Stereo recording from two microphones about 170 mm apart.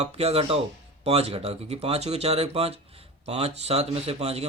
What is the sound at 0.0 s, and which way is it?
Speech, 35° right (ahead or behind).